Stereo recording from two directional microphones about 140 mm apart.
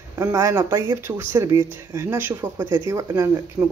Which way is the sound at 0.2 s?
20° right (ahead or behind).